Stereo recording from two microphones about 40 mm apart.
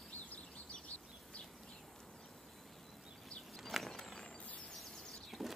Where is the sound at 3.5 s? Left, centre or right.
Centre.